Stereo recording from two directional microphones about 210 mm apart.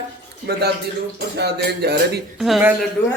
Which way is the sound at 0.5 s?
50° right (ahead or behind).